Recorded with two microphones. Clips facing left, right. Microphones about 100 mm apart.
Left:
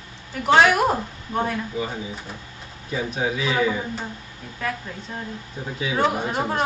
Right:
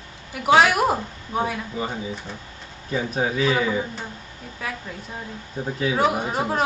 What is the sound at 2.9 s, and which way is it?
Speech, 40° right (ahead or behind).